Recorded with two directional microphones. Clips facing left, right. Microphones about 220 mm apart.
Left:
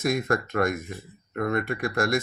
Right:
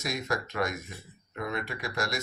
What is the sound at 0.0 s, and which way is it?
Speech, 55° left (ahead or behind).